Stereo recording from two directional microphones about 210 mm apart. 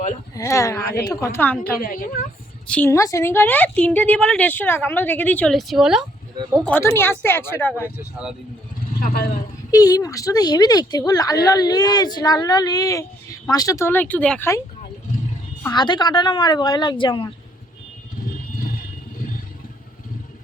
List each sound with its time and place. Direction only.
0.3 s a woman's voice: 15° left (ahead or behind)
1.8 s a woman's voice: 40° left (ahead or behind)
2.6 s a woman's voice: 10° left (ahead or behind)
6.6 s a woman's voice: 10° left (ahead or behind)
7.9 s speech: 5° right (ahead or behind)
9.0 s a woman's voice: 45° left (ahead or behind)
9.7 s a woman's voice: 15° left (ahead or behind)
15.6 s speech: 20° left (ahead or behind)